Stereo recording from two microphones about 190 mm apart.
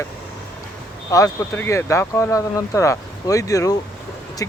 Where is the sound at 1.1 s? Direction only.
15° left (ahead or behind).